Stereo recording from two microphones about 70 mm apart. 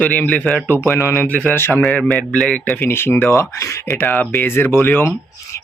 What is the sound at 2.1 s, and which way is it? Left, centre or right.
Speech, centre.